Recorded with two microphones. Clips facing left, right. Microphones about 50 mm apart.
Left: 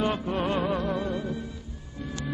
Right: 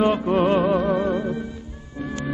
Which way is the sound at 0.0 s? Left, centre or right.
Right.